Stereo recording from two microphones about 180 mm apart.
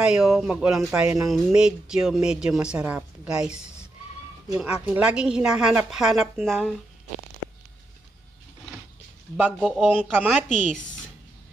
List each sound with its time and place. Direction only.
0.0 s a woman's voice: 5° right (ahead or behind)
9.4 s a woman's voice: centre (ahead or behind)
10.1 s speech: 10° right (ahead or behind)
10.5 s speech: 40° left (ahead or behind)